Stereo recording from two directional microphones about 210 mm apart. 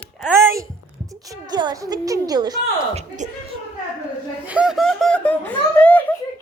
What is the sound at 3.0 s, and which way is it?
Speech, 35° right (ahead or behind).